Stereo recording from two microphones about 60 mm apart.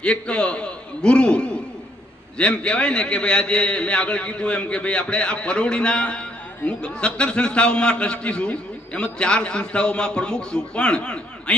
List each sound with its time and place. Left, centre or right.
0.0 s a man's voice: centre